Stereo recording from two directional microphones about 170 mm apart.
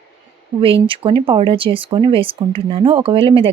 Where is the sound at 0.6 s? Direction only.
35° right (ahead or behind).